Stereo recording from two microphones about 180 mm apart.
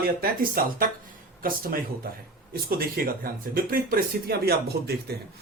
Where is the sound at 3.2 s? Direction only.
55° right (ahead or behind).